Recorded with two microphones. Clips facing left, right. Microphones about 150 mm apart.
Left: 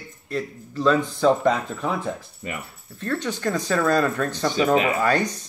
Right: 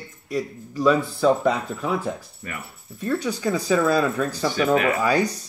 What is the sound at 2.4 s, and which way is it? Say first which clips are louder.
Speech: left 4 dB; 20° left (ahead or behind).